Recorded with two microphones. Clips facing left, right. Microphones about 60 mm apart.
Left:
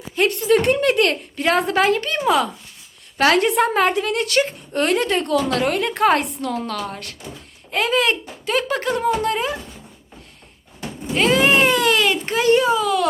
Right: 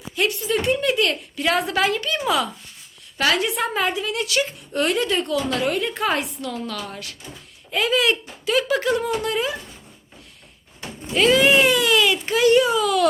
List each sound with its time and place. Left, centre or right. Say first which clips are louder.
0.3 s speech: left 6 dB; left
1.1 s speech: left 3 dB; left
11.1 s a sound: even; left